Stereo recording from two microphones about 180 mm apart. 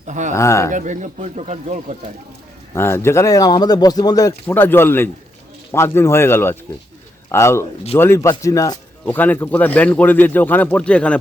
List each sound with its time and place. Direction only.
0.1 s speech: 45° right (ahead or behind)
0.3 s speech: 15° left (ahead or behind)
0.7 s speech: 45° right (ahead or behind)
2.7 s speech: 15° left (ahead or behind)